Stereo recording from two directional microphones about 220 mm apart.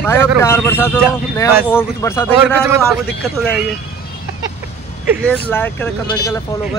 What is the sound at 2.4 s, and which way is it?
Speech, 10° right (ahead or behind).